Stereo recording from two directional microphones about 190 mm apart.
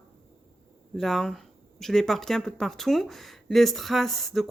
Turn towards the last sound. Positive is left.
turn(degrees=0)  # may be behind; listen again after turning